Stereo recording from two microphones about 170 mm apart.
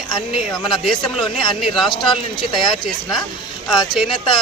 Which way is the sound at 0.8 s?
Centre (ahead or behind).